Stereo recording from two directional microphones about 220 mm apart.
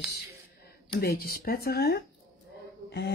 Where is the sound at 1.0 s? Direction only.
45° left (ahead or behind).